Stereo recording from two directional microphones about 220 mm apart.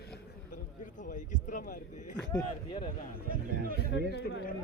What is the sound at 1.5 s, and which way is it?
Speech, 35° left (ahead or behind).